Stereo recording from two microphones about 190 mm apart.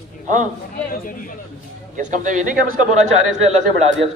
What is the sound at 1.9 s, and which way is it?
Speech, 40° right (ahead or behind).